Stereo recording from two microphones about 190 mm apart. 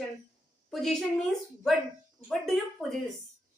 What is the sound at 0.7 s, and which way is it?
A woman's voice, centre (ahead or behind).